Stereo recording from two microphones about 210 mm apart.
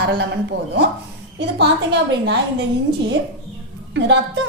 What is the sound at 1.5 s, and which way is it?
Speech, 55° right (ahead or behind).